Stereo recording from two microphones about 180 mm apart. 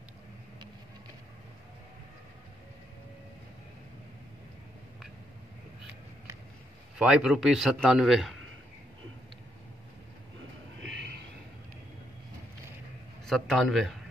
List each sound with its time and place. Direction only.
7.0 s a man's voice: 5° right (ahead or behind)
10.8 s a sound: 75° right (ahead or behind)
13.2 s a man's voice: centre (ahead or behind)